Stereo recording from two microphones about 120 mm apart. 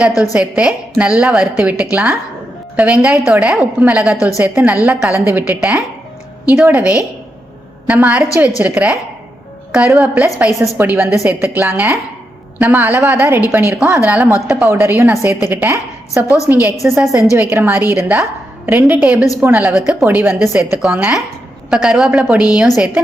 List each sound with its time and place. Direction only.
0.3 s a woman's voice: 10° right (ahead or behind)
10.8 s a woman's voice: 15° right (ahead or behind)
20.6 s a woman's voice: 10° right (ahead or behind)